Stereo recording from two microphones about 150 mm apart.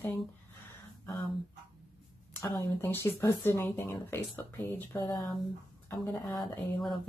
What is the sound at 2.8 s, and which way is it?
Speech, 15° left (ahead or behind).